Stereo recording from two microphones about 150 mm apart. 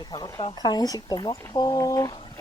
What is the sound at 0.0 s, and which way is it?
Speech, 25° left (ahead or behind).